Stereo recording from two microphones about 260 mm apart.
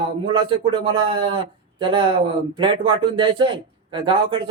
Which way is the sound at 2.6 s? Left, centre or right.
Centre.